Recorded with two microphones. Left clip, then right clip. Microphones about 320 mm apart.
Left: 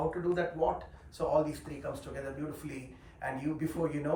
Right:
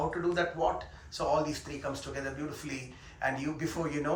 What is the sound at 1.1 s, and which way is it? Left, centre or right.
Speech, centre.